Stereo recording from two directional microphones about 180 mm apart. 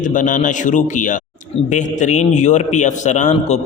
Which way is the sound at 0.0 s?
45° left (ahead or behind).